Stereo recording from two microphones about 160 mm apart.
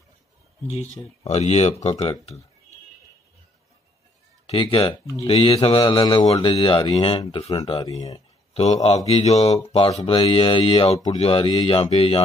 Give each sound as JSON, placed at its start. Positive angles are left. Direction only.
{"t": 1.2, "sound": "speech", "side_deg": 45}
{"t": 4.5, "sound": "speech", "side_deg": 35}
{"t": 7.8, "sound": "speech", "side_deg": 25}
{"t": 9.1, "sound": "speech", "side_deg": 40}